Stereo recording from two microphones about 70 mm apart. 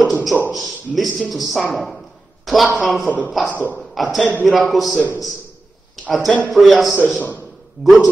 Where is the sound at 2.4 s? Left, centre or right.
Centre.